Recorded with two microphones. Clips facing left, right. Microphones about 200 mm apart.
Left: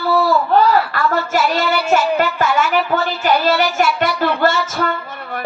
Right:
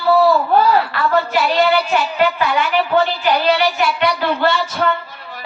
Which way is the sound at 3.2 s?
45° left (ahead or behind).